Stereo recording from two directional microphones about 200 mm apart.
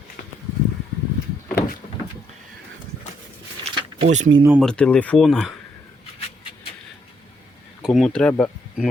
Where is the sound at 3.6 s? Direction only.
35° right (ahead or behind).